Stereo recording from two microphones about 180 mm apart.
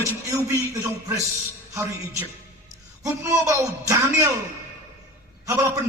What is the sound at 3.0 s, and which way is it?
A man's voice, 20° right (ahead or behind).